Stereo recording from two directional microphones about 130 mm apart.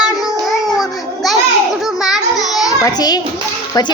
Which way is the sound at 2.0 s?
5° right (ahead or behind).